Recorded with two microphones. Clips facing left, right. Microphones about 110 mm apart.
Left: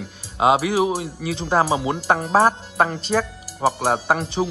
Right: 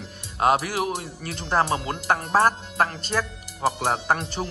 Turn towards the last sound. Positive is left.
turn(degrees=10)  # may be behind; listen again after turning